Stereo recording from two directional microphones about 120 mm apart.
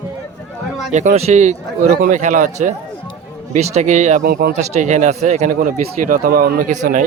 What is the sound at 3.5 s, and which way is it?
Speech, 75° right (ahead or behind).